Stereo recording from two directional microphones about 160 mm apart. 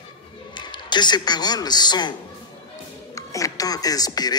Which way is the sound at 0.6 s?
30° left (ahead or behind).